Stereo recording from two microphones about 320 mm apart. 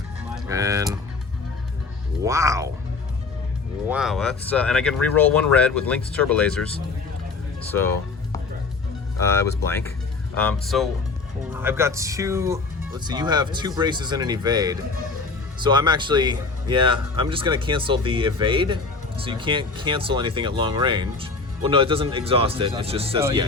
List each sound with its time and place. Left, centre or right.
0.3 s a sound: centre
2.2 s speech: centre
3.8 s speech: centre
9.2 s speech: centre